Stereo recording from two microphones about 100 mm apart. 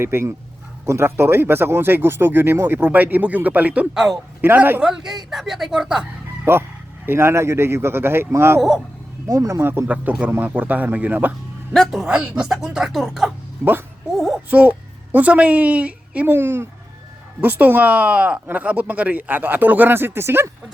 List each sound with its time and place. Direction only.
0.0 s a man's voice: 25° right (ahead or behind)
4.8 s speech: 5° right (ahead or behind)
6.4 s speech: 25° right (ahead or behind)
9.8 s speech: 15° right (ahead or behind)
11.7 s speech: centre (ahead or behind)
14.5 s a woman's voice: 15° right (ahead or behind)